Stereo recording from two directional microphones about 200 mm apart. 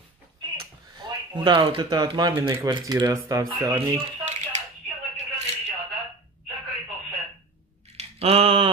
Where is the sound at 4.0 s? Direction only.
35° right (ahead or behind).